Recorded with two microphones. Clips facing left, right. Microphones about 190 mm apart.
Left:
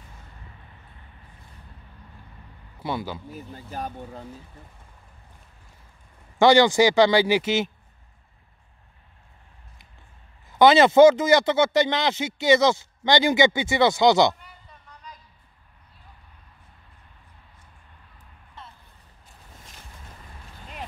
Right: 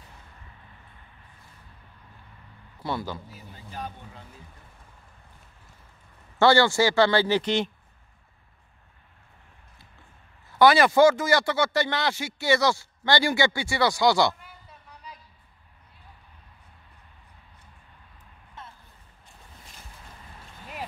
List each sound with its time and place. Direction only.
3.3 s speech: 50° left (ahead or behind)
6.3 s a man's voice: 15° left (ahead or behind)
10.6 s speech: 20° left (ahead or behind)
14.4 s a sound: 5° right (ahead or behind)